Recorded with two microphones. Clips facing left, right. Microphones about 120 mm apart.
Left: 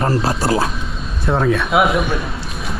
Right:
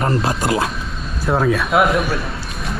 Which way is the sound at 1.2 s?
5° right (ahead or behind).